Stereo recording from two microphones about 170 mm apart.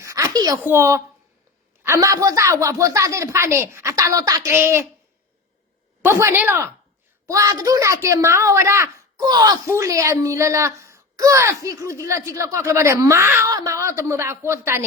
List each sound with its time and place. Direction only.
0.0 s a sound: 20° right (ahead or behind)
0.6 s a woman's voice: 15° right (ahead or behind)
6.0 s a woman's voice: 15° right (ahead or behind)